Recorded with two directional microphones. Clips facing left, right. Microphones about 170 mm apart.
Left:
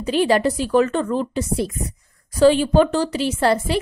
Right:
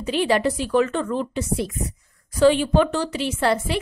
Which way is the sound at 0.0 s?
40° left (ahead or behind).